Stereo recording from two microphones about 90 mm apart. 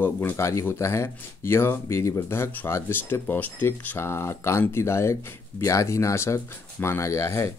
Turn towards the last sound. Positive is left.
turn(degrees=30)  # may be behind; listen again after turning